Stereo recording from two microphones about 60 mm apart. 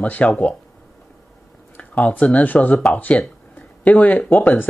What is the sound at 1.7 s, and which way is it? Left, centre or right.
Speech, left.